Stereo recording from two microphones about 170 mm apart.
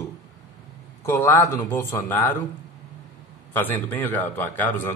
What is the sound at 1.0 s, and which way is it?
Speech, 15° left (ahead or behind).